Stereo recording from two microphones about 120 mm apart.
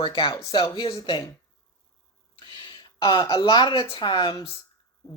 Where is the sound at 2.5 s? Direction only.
40° left (ahead or behind).